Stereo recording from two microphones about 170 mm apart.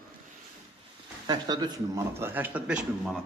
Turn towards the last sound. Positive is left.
turn(degrees=-10)  # may be behind; listen again after turning